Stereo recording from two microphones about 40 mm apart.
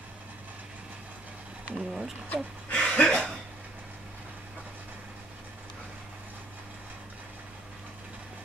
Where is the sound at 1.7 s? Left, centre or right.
Right.